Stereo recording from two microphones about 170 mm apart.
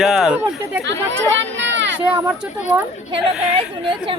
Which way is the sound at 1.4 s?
90° right.